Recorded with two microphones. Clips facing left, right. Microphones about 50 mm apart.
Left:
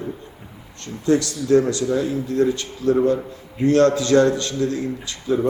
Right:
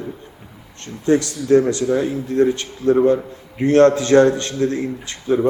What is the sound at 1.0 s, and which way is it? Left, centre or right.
A man's voice, right.